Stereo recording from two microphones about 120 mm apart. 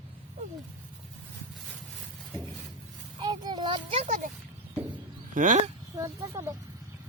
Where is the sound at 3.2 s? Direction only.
35° right (ahead or behind).